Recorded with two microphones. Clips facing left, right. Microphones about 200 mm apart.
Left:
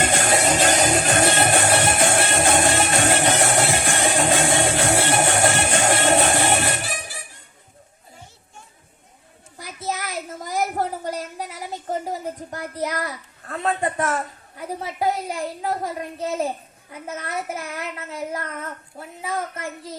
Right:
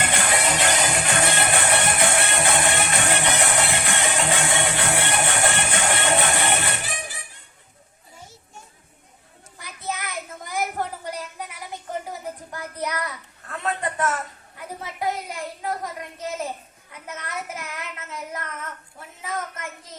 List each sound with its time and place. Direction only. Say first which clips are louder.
0.0 s music: left 4 dB; 45° left (ahead or behind)
2.0 s music: left 3 dB; 30° left (ahead or behind)
4.0 s music: left 6 dB; 45° left (ahead or behind)
9.9 s a sound: left 3 dB; 35° left (ahead or behind)
16.9 s child singing: left 5 dB; 30° left (ahead or behind)